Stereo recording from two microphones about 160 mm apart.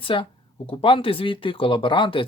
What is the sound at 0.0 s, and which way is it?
Speech, 35° left (ahead or behind).